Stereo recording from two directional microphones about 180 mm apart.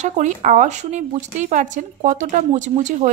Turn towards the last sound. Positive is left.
turn(degrees=-40)  # may be behind; listen again after turning